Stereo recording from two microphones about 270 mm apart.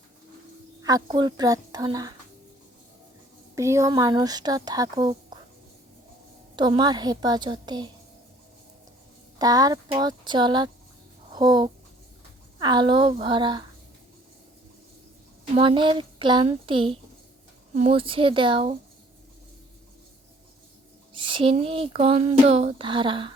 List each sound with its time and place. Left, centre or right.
0.8 s speech: centre
3.5 s speech: centre
6.6 s speech: centre
9.4 s speech: centre
15.5 s a sound: centre
21.1 s a sound: centre